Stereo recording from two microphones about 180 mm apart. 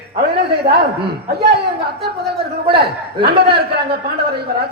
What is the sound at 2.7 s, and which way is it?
Speech, 65° right (ahead or behind).